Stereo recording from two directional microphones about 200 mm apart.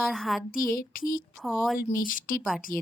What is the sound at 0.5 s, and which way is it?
A woman's voice, 45° left (ahead or behind).